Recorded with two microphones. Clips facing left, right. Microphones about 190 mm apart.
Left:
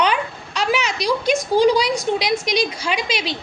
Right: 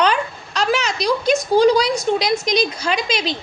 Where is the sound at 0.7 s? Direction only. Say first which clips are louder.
Right 1 dB; 40° right (ahead or behind).